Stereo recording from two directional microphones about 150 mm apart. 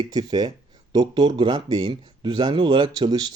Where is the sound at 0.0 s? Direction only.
30° right (ahead or behind).